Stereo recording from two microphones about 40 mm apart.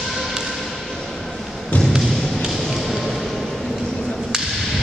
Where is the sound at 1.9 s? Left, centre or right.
Centre.